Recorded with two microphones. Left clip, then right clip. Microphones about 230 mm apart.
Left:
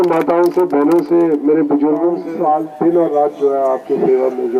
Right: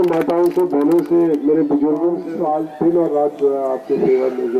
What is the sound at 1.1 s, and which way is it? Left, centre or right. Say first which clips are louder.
A man's voice: left 2 dB; centre.